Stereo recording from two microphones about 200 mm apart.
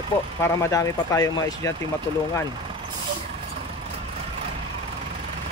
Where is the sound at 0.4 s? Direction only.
15° left (ahead or behind).